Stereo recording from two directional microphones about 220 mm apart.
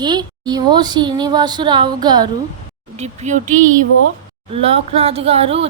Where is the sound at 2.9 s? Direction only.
30° right (ahead or behind).